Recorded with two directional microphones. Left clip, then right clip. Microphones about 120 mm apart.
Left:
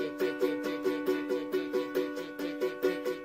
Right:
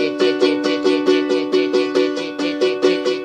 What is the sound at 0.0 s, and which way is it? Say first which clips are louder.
Music: right 15 dB; 10° right (ahead or behind).